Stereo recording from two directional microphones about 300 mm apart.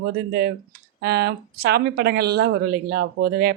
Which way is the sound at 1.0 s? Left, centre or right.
Right.